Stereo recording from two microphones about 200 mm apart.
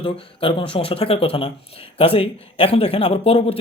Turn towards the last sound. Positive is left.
turn(degrees=30)  # may be behind; listen again after turning